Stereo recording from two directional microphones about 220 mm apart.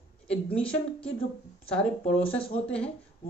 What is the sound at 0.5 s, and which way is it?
Speech, 5° left (ahead or behind).